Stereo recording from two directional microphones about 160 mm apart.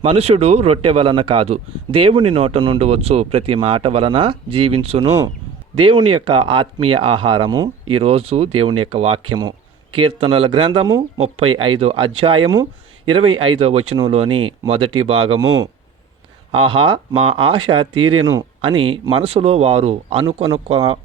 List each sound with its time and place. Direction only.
0.0 s speech: 40° right (ahead or behind)
7.9 s speech: 35° right (ahead or behind)
11.2 s speech: 35° right (ahead or behind)
16.5 s speech: 35° right (ahead or behind)